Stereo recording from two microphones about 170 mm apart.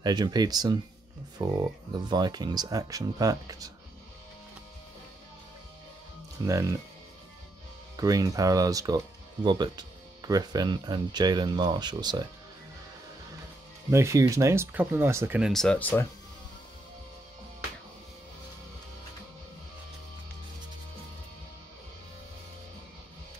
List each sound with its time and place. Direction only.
0.0 s speech: 25° right (ahead or behind)
6.4 s speech: 20° right (ahead or behind)
7.9 s speech: 20° right (ahead or behind)
13.8 s speech: 15° right (ahead or behind)
15.5 s speech: 5° left (ahead or behind)